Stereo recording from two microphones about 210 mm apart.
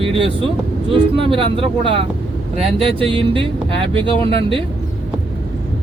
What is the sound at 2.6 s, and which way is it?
Speech, 25° right (ahead or behind).